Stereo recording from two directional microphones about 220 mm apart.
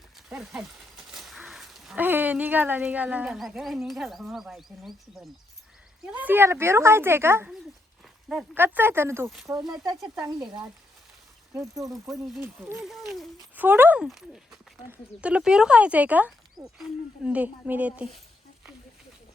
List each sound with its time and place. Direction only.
0.3 s speech: centre (ahead or behind)
9.7 s speech: 15° right (ahead or behind)
12.1 s speech: centre (ahead or behind)